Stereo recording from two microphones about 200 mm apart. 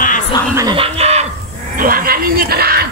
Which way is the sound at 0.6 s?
25° right (ahead or behind).